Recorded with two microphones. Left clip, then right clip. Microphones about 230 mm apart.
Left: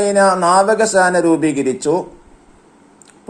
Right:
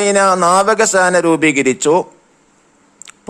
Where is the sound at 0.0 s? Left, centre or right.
Right.